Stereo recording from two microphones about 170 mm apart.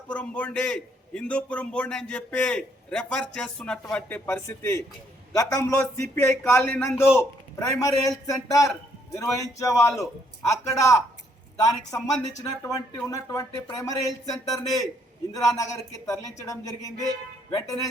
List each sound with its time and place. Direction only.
0.1 s a man's voice: 5° left (ahead or behind)